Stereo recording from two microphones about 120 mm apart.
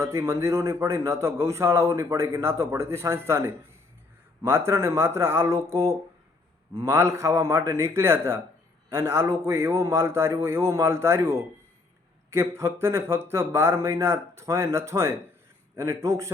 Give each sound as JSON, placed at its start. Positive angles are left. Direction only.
{"t": 0.0, "sound": "a man's voice", "side_deg": -25}
{"t": 6.7, "sound": "a man's voice", "side_deg": -25}